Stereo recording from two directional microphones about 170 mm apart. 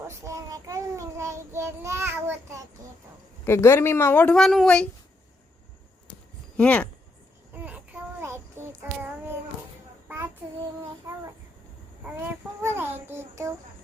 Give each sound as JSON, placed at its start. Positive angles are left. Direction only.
{"t": 0.1, "sound": "child singing", "side_deg": -20}
{"t": 3.4, "sound": "speech", "side_deg": 15}
{"t": 6.6, "sound": "speech", "side_deg": 10}
{"t": 7.5, "sound": "child singing", "side_deg": -10}
{"t": 11.1, "sound": "a child's voice", "side_deg": -20}